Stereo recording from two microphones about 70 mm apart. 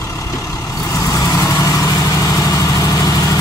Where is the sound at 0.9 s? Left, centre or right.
Left.